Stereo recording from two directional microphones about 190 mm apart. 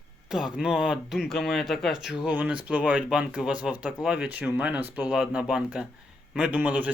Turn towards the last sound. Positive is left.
turn(degrees=-10)  # may be behind; listen again after turning